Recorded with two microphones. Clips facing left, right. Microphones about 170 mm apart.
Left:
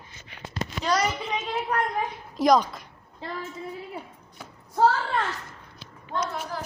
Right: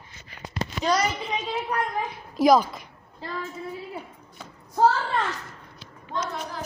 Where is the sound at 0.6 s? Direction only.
35° right (ahead or behind).